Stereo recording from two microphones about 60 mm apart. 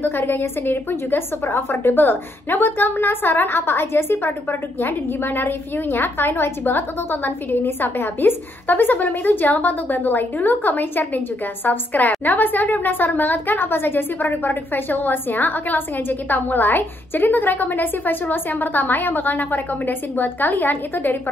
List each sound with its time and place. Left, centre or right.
0.0 s a woman's voice: left